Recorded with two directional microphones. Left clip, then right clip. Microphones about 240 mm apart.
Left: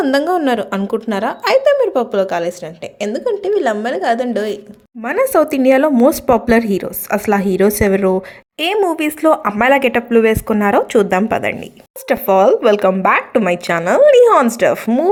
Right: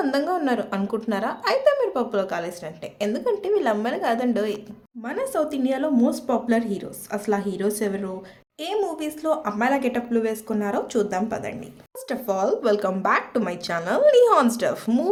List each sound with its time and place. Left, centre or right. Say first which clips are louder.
0.0 s a woman's voice: left 9 dB; left
5.0 s a woman's voice: left 12 dB; left